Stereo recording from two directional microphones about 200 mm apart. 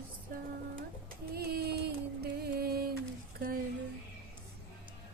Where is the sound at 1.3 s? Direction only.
50° right (ahead or behind).